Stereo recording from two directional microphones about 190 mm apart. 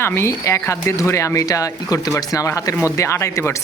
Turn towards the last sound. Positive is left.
turn(degrees=15)  # may be behind; listen again after turning